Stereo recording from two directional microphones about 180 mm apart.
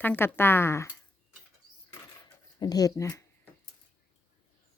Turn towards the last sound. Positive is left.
turn(degrees=15)  # may be behind; listen again after turning